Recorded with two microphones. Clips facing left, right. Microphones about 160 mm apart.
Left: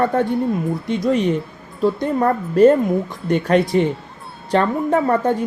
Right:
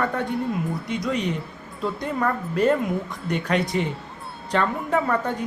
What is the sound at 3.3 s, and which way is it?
Speech, 50° left (ahead or behind).